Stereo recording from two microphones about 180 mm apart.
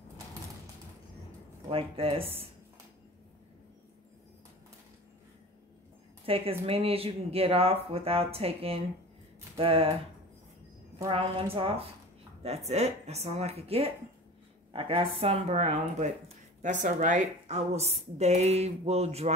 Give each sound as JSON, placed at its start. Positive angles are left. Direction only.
{"t": 1.7, "sound": "a woman's voice", "side_deg": -30}
{"t": 6.2, "sound": "a woman's voice", "side_deg": -30}
{"t": 11.1, "sound": "a woman's voice", "side_deg": -30}